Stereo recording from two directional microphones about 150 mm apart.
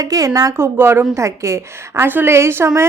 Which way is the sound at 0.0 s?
25° right (ahead or behind).